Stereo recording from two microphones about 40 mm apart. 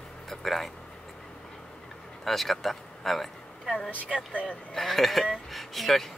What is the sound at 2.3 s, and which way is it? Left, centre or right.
Speech, centre.